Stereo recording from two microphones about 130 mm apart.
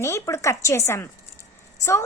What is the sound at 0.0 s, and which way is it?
A woman's voice, 25° left (ahead or behind).